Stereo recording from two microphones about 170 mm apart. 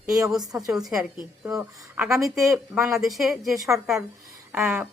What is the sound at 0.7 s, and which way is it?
Speech, centre (ahead or behind).